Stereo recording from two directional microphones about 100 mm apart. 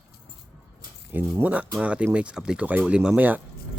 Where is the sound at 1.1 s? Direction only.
15° right (ahead or behind).